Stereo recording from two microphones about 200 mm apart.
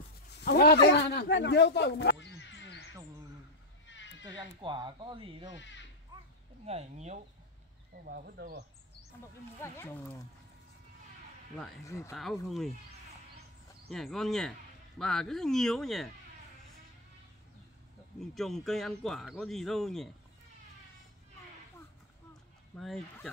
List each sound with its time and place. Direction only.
0.4 s a man's voice: 50° left (ahead or behind)
3.8 s sheep: 65° left (ahead or behind)
4.3 s speech: 25° right (ahead or behind)
5.6 s speech: 65° left (ahead or behind)
6.6 s speech: 30° right (ahead or behind)
8.0 s speech: 45° right (ahead or behind)
9.6 s speech: 15° left (ahead or behind)
11.8 s speech: 15° left (ahead or behind)
12.1 s speech: centre (ahead or behind)
13.8 s speech: centre (ahead or behind)
18.2 s speech: centre (ahead or behind)
22.8 s speech: centre (ahead or behind)